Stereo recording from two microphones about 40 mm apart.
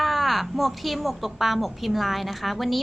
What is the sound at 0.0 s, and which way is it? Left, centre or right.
Speech, centre.